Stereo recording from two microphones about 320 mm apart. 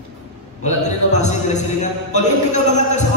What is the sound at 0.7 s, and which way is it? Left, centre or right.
A man's voice, left.